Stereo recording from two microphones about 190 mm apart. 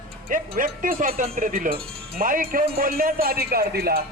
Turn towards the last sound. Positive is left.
turn(degrees=-55)  # may be behind; listen again after turning